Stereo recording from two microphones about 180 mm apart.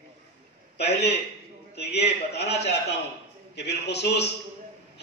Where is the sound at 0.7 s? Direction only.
65° left (ahead or behind).